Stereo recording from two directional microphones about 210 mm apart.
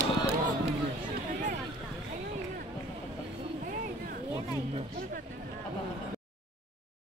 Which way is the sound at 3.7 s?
40° right (ahead or behind).